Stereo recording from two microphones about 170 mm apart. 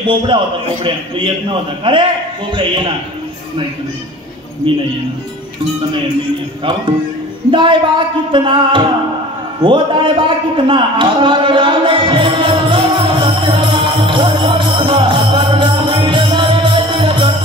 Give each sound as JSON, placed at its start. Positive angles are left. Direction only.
{"t": 0.0, "sound": "a man's voice", "side_deg": -30}
{"t": 4.7, "sound": "a man's voice", "side_deg": -30}
{"t": 7.5, "sound": "a man's voice", "side_deg": -30}
{"t": 9.6, "sound": "a sound", "side_deg": -30}